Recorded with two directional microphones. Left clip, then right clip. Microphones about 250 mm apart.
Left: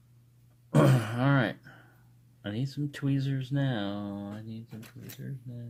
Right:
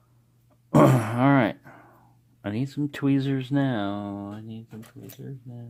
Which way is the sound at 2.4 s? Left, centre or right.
Right.